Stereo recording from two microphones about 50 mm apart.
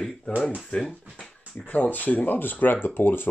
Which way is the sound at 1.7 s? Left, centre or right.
Left.